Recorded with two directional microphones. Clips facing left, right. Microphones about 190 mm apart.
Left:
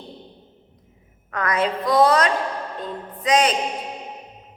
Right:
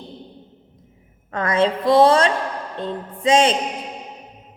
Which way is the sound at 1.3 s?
25° right (ahead or behind).